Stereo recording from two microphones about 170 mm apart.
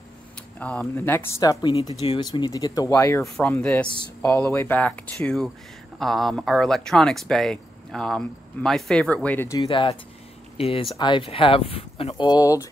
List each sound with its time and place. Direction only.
0.6 s speech: 5° left (ahead or behind)
9.7 s speech: 35° left (ahead or behind)